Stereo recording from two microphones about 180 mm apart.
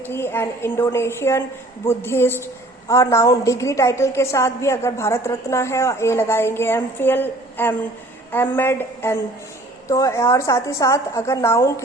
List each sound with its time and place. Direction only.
0.1 s a woman's voice: 15° left (ahead or behind)